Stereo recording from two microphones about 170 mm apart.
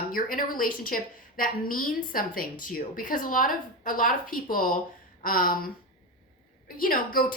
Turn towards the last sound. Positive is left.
turn(degrees=55)  # may be behind; listen again after turning